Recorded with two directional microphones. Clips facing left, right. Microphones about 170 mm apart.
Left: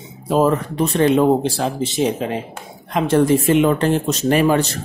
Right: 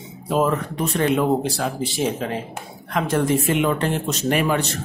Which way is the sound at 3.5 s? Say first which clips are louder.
Left 5 dB; 35° left (ahead or behind).